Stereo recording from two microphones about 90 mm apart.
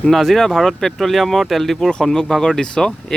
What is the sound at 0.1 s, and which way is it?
Speech, 5° left (ahead or behind).